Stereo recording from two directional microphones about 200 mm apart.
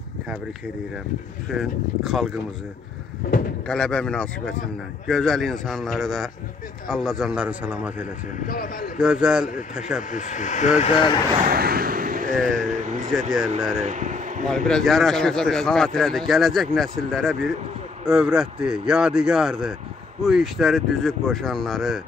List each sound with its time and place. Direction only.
1.5 s speech: centre (ahead or behind)
3.6 s speech: 5° left (ahead or behind)
8.5 s speech: 45° left (ahead or behind)
9.0 s speech: 5° right (ahead or behind)
10.1 s speech: 40° left (ahead or behind)
11.4 s vehicle: 50° right (ahead or behind)
12.4 s speech: 5° left (ahead or behind)
12.6 s vehicle: 40° right (ahead or behind)
13.7 s speech: 35° right (ahead or behind)
14.7 s speech: centre (ahead or behind)